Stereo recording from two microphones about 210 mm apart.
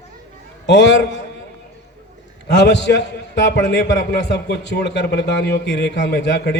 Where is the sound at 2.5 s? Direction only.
55° left (ahead or behind).